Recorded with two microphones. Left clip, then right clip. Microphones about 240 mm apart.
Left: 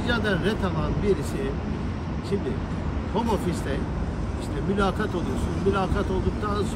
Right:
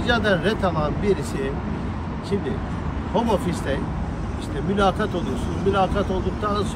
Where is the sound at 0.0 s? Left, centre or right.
Centre.